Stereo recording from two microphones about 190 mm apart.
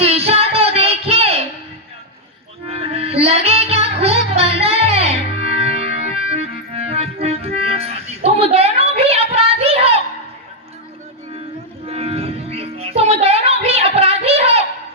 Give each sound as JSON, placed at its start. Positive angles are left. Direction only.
{"t": 0.0, "sound": "music", "side_deg": -30}
{"t": 2.6, "sound": "music", "side_deg": -30}
{"t": 11.9, "sound": "music", "side_deg": -30}